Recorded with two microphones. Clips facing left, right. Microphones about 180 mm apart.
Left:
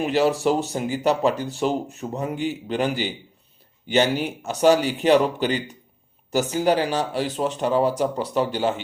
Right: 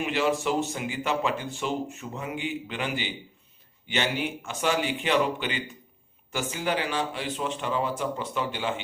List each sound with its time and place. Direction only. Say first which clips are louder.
0.0 s speech: left 6 dB; 35° left (ahead or behind)